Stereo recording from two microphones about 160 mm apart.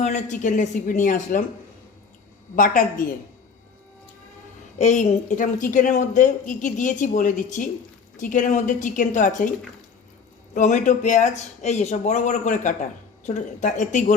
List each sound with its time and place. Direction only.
0.0 s a woman's voice: 50° left (ahead or behind)
2.6 s a woman's voice: 60° left (ahead or behind)
4.8 s a woman's voice: 45° left (ahead or behind)
10.5 s a woman's voice: 50° left (ahead or behind)